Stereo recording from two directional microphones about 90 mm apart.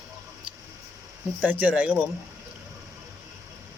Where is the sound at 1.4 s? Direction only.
15° right (ahead or behind).